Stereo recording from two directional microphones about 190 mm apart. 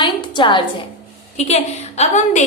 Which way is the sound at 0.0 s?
25° left (ahead or behind).